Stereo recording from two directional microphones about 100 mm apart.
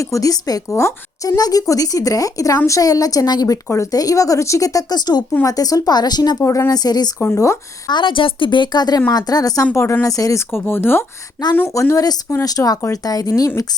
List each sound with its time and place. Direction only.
0.0 s a woman's voice: 35° left (ahead or behind)
1.4 s a woman's voice: 40° left (ahead or behind)
6.4 s a woman's voice: 30° left (ahead or behind)
7.2 s speech: 30° left (ahead or behind)
7.9 s a woman's voice: 50° left (ahead or behind)
9.7 s a woman's voice: 25° left (ahead or behind)
10.5 s a woman's voice: 20° left (ahead or behind); by 13.5 s 35° left (ahead or behind)